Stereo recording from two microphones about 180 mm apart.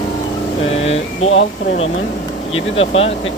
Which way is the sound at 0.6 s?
35° left (ahead or behind).